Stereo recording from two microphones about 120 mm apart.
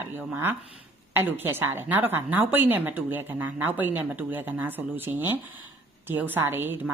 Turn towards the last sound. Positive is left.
turn(degrees=-20)  # may be behind; listen again after turning